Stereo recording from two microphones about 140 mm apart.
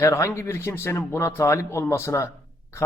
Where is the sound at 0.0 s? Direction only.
20° left (ahead or behind).